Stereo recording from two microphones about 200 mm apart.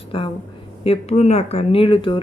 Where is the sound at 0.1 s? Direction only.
25° left (ahead or behind).